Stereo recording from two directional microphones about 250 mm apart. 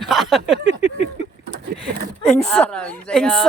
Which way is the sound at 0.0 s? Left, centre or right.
Centre.